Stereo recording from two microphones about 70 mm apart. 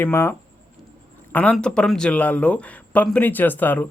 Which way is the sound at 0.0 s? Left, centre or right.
Left.